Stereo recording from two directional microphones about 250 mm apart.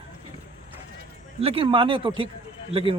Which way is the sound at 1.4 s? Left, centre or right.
Right.